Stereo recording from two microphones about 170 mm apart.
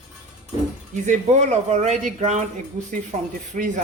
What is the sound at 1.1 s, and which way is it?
Speech, 45° right (ahead or behind).